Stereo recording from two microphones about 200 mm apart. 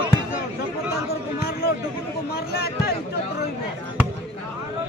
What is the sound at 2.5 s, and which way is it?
Speech, 55° left (ahead or behind).